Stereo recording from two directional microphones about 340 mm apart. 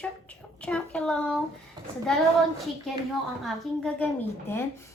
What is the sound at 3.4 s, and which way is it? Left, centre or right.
A woman's voice, centre.